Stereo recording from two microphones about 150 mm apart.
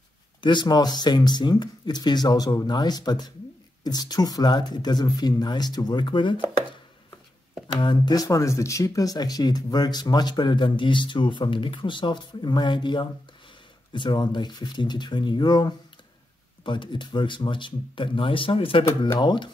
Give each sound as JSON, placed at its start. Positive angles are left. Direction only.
{"t": 0.4, "sound": "speech", "side_deg": 30}
{"t": 7.6, "sound": "speech", "side_deg": 30}